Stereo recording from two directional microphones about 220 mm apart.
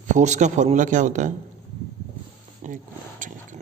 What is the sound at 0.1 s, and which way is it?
A man's voice, 35° right (ahead or behind).